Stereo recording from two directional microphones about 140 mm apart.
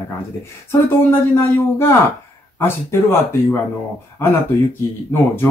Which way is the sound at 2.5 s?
15° left (ahead or behind).